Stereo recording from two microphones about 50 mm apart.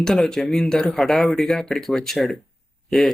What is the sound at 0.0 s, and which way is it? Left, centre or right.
Speech, centre.